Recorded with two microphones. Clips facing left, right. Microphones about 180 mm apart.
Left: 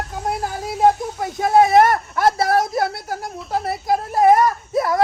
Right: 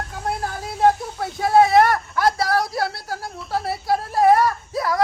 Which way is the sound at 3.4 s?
Centre (ahead or behind).